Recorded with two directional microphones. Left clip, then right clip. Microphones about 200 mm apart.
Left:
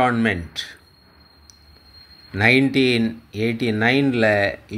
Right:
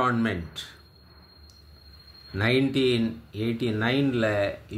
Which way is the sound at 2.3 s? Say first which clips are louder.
Left 8 dB; 20° left (ahead or behind).